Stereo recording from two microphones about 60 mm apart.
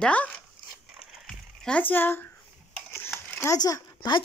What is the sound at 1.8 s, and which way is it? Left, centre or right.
Speech, left.